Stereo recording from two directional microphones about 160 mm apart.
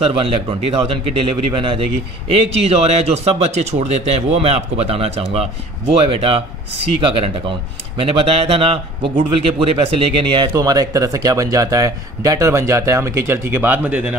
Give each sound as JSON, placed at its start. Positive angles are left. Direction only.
{"t": 0.0, "sound": "speech", "side_deg": -35}
{"t": 8.0, "sound": "a man's voice", "side_deg": -35}